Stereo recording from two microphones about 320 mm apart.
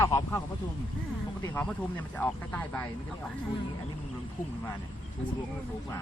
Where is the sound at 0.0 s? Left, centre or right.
Centre.